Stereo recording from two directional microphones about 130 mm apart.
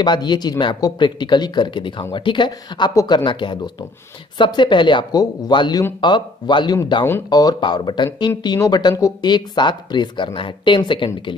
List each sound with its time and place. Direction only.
0.0 s speech: 35° left (ahead or behind)
2.9 s speech: 25° left (ahead or behind)
3.3 s speech: 40° left (ahead or behind)